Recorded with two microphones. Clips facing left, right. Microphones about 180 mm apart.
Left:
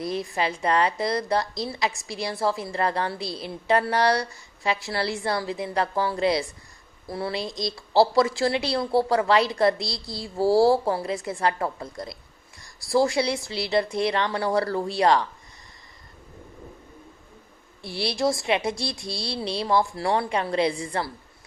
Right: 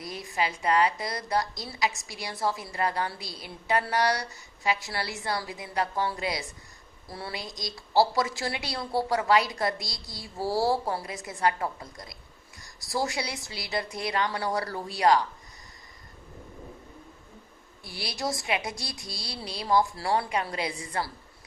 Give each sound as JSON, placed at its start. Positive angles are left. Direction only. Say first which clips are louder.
{"t": 0.2, "sound": "a woman's voice", "louder": "left 4 dB", "side_deg": 30}
{"t": 12.8, "sound": "speech", "louder": "left 9 dB", "side_deg": 30}
{"t": 17.8, "sound": "speech", "louder": "left 8 dB", "side_deg": 25}